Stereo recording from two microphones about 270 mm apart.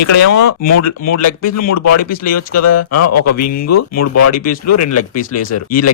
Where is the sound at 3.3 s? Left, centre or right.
Left.